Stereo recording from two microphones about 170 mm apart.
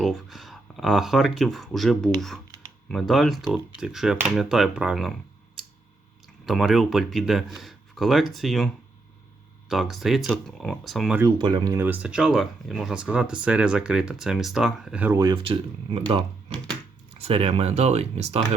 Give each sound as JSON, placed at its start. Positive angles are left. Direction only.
{"t": 0.0, "sound": "speech", "side_deg": 0}
{"t": 6.4, "sound": "speech", "side_deg": 0}
{"t": 11.2, "sound": "speech", "side_deg": -25}
{"t": 15.2, "sound": "speech", "side_deg": -25}